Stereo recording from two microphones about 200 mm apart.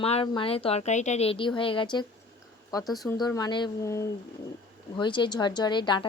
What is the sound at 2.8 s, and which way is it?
Speech, centre (ahead or behind).